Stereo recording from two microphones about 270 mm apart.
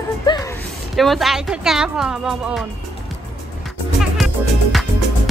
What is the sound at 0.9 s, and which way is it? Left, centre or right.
Speech, centre.